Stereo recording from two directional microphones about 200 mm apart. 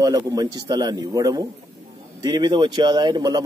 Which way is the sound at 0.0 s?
20° right (ahead or behind).